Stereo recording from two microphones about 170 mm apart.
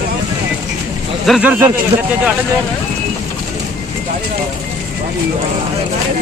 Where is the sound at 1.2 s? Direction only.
Centre (ahead or behind).